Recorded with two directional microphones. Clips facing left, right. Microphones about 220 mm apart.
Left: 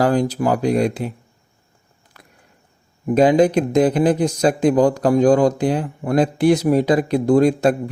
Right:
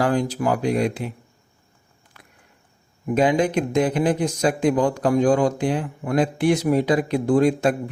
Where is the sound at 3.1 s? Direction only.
35° left (ahead or behind).